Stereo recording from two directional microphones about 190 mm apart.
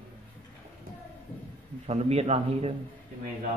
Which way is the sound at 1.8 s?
35° right (ahead or behind).